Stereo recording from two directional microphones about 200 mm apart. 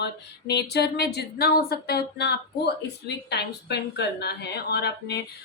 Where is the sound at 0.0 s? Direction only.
55° left (ahead or behind).